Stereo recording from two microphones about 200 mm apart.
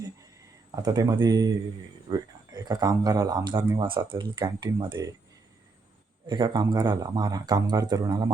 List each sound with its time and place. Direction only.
0.8 s speech: 20° right (ahead or behind)
6.2 s speech: 20° right (ahead or behind)